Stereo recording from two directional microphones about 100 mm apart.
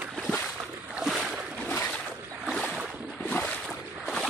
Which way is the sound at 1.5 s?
20° left (ahead or behind).